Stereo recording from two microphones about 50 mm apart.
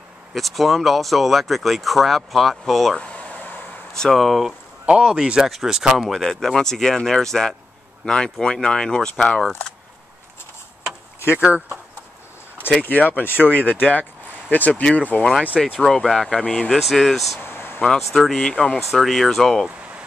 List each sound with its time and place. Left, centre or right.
0.3 s speech: centre
3.0 s a sound: left
3.9 s speech: centre
4.8 s speech: centre
6.2 s speech: centre
11.3 s speech: right
12.8 s speech: left
14.8 s speech: left
15.8 s speech: centre
16.7 s speech: centre
17.4 s a sound: left
18.1 s speech: centre
18.4 s speech: centre
18.8 s speech: centre